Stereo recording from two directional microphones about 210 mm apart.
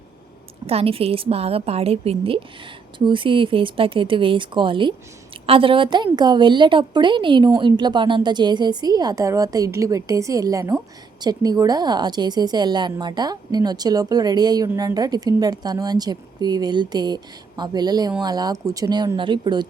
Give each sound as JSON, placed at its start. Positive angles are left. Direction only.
{"t": 0.7, "sound": "a woman's voice", "side_deg": -30}